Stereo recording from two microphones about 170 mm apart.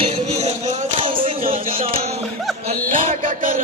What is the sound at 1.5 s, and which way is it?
Music, 35° right (ahead or behind).